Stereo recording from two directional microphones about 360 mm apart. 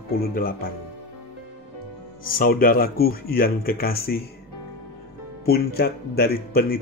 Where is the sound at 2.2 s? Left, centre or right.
Left.